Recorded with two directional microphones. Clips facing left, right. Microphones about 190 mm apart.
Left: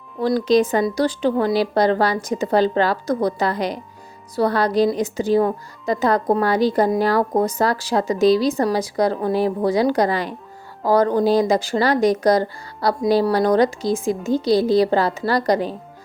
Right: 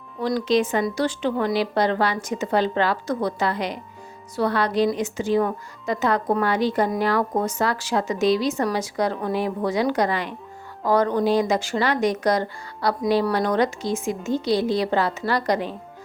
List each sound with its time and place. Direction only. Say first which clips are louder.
0.2 s speech: left 4 dB; 40° left (ahead or behind)